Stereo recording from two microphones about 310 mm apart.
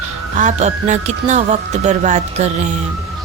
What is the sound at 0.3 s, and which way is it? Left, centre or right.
A woman's voice, right.